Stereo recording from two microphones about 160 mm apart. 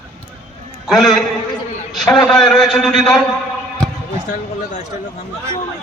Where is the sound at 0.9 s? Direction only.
Centre (ahead or behind).